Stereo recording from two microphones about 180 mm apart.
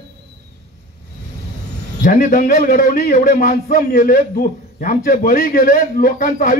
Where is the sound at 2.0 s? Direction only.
50° left (ahead or behind).